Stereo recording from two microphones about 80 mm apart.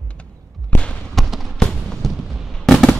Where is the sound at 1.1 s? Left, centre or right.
Centre.